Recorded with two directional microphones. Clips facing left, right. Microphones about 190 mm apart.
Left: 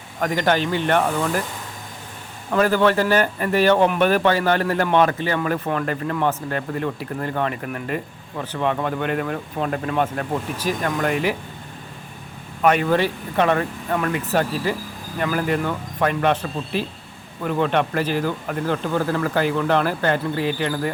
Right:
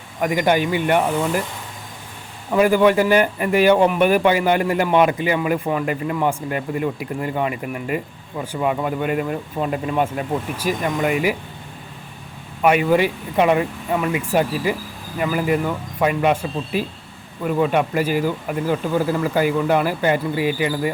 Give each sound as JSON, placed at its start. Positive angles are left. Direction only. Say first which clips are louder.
{"t": 0.2, "sound": "a man's voice", "louder": "right 2 dB", "side_deg": -10}
{"t": 2.5, "sound": "a man's voice", "louder": "right 3 dB", "side_deg": -10}
{"t": 12.6, "sound": "a man's voice", "louder": "right 2 dB", "side_deg": -10}